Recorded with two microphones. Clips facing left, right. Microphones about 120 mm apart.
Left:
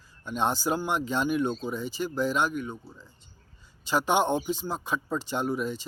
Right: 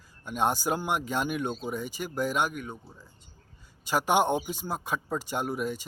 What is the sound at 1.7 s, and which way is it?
Speech, 50° right (ahead or behind).